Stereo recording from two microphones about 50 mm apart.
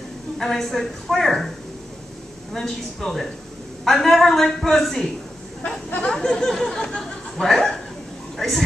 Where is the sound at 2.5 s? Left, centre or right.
Centre.